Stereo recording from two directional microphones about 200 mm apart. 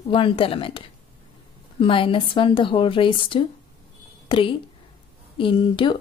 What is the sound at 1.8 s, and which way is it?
Speech, 25° left (ahead or behind).